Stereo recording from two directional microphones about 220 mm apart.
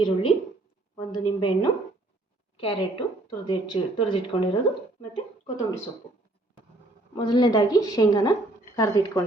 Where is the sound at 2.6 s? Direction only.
25° left (ahead or behind).